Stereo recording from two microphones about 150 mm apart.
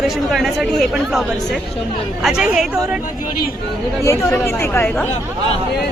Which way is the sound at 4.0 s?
20° left (ahead or behind).